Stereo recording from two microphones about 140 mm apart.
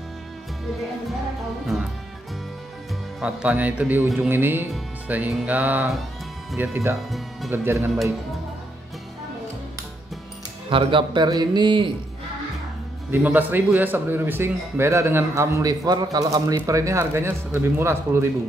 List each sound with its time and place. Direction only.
3.2 s a man's voice: 10° right (ahead or behind)
5.0 s music: 10° right (ahead or behind)
5.3 s a man's voice: 10° right (ahead or behind)
7.0 s speech: centre (ahead or behind)
7.5 s a man's voice: 15° right (ahead or behind)
10.7 s a man's voice: 35° right (ahead or behind)
13.1 s a man's voice: 10° right (ahead or behind)